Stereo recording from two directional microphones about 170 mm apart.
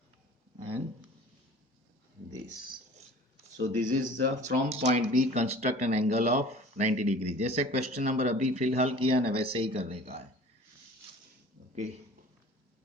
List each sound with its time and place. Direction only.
3.8 s speech: 50° right (ahead or behind)